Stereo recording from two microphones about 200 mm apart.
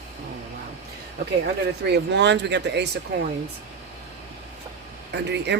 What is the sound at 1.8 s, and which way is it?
Speech, 60° right (ahead or behind).